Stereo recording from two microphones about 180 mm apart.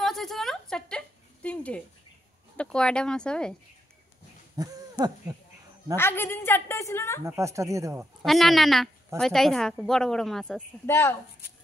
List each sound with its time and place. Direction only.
0.0 s a sound: centre (ahead or behind)
2.5 s a woman's voice: 5° left (ahead or behind)
4.6 s a sound: 20° right (ahead or behind)
5.9 s a woman's voice: 10° left (ahead or behind)
7.2 s speech: 15° right (ahead or behind)
8.3 s a woman's voice: centre (ahead or behind)
10.9 s a woman's voice: 15° left (ahead or behind)